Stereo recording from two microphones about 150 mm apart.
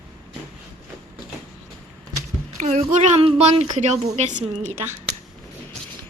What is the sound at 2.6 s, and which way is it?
A woman's voice, 50° right (ahead or behind).